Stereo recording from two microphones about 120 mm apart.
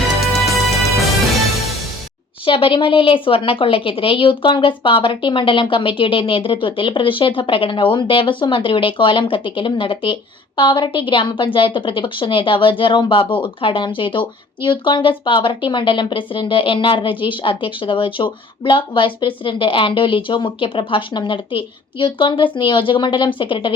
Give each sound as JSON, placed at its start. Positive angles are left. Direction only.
{"t": 0.2, "sound": "music", "side_deg": 0}
{"t": 2.5, "sound": "a woman's voice", "side_deg": 45}